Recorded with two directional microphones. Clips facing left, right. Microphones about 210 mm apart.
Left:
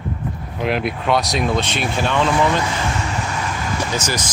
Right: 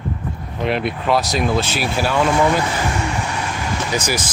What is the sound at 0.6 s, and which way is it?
Speech, centre (ahead or behind).